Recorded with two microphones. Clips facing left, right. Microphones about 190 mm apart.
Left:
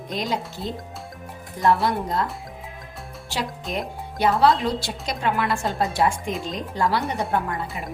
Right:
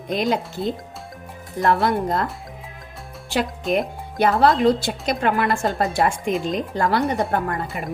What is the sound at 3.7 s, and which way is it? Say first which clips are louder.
A woman's voice: right 7 dB; 55° right (ahead or behind).